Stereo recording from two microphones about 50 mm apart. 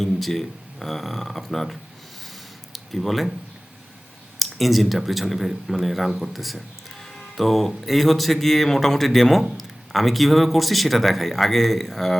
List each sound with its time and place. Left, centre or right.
0.0 s speech: centre
4.4 s speech: centre
7.0 s music: centre
7.9 s speech: centre